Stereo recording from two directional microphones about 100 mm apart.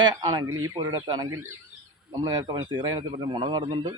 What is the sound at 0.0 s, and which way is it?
Speech, 45° right (ahead or behind).